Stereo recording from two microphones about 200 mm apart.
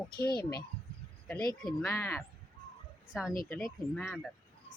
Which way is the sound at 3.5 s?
Centre (ahead or behind).